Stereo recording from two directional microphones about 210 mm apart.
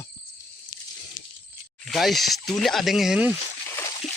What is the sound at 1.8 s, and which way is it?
Speech, centre (ahead or behind).